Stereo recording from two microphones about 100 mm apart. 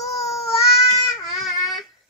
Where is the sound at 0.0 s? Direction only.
35° left (ahead or behind).